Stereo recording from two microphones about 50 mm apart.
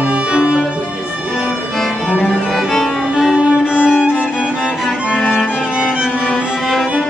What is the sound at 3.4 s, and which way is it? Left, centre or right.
Music, centre.